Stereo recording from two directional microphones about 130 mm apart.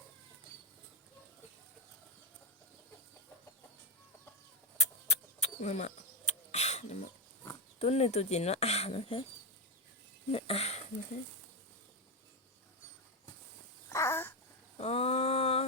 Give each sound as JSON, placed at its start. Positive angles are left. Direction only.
{"t": 4.8, "sound": "mechanisms", "side_deg": 55}
{"t": 7.8, "sound": "speech", "side_deg": 50}
{"t": 10.3, "sound": "speech", "side_deg": 50}
{"t": 13.9, "sound": "babbling", "side_deg": 20}
{"t": 14.8, "sound": "a sound", "side_deg": 50}